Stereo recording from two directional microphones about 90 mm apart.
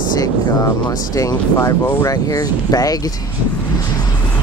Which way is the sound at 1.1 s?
40° left (ahead or behind).